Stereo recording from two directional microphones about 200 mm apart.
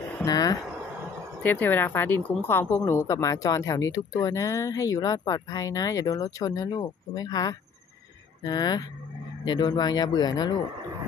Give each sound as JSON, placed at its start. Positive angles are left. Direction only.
{"t": 0.2, "sound": "speech", "side_deg": 20}